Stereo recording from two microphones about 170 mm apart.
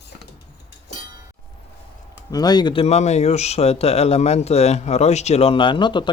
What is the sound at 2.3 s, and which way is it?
Speech, 25° left (ahead or behind).